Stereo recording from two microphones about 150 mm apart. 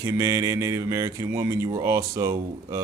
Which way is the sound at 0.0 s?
20° right (ahead or behind).